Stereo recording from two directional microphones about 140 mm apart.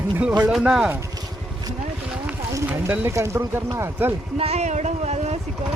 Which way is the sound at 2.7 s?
10° right (ahead or behind).